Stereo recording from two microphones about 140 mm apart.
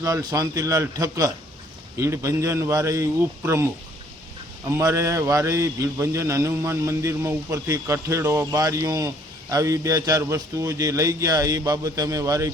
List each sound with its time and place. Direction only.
0.0 s a man's voice: 25° right (ahead or behind)
4.7 s a man's voice: 20° right (ahead or behind)